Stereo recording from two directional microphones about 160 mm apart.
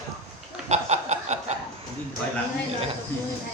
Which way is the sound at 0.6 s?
45° right (ahead or behind).